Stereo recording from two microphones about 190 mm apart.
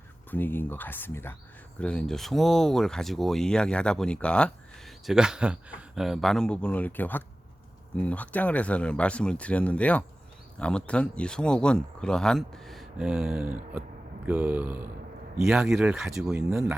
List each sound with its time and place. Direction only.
0.3 s speech: 10° left (ahead or behind)
16.3 s speech: 10° right (ahead or behind)